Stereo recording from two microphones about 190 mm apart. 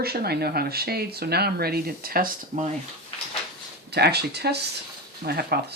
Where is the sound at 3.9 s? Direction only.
60° right (ahead or behind).